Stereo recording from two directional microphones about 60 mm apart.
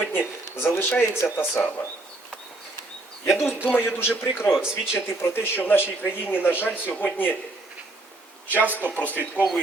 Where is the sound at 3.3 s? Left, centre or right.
Left.